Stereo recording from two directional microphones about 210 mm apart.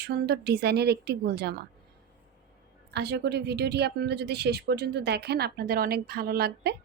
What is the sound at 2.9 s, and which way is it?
Speech, 50° right (ahead or behind).